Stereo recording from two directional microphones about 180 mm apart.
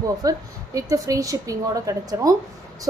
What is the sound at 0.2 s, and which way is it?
A woman's voice, 20° right (ahead or behind).